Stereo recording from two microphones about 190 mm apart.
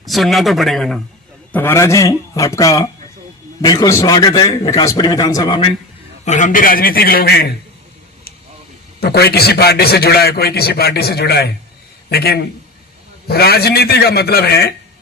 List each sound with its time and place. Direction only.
0.0 s a man's voice: centre (ahead or behind)
1.5 s a man's voice: 15° left (ahead or behind)
6.2 s a man's voice: 40° left (ahead or behind); by 7.5 s 55° left (ahead or behind)
9.0 s a man's voice: 55° left (ahead or behind)